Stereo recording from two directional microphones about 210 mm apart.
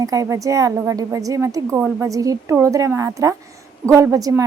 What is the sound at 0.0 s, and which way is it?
A woman's voice, 15° right (ahead or behind).